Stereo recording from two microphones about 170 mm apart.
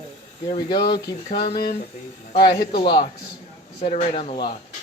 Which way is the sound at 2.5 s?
75° left (ahead or behind).